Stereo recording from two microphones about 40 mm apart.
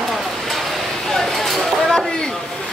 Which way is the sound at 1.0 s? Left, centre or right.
Centre.